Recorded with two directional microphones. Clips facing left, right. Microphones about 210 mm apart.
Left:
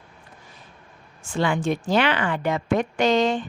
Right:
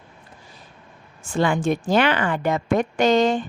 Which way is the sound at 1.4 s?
45° right (ahead or behind).